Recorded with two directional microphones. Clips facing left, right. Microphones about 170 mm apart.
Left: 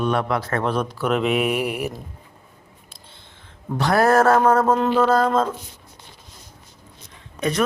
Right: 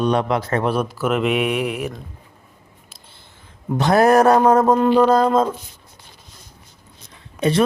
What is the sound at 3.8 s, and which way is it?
Speech, 20° right (ahead or behind).